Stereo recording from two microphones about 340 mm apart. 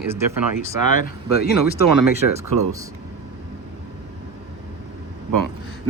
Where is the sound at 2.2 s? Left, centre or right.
Right.